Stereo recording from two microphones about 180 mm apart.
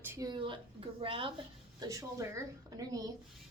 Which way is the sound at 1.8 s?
20° right (ahead or behind).